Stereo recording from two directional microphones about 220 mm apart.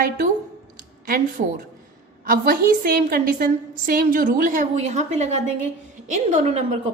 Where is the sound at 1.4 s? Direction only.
35° right (ahead or behind).